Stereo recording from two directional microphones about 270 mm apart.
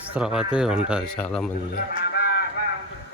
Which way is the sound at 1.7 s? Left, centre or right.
Left.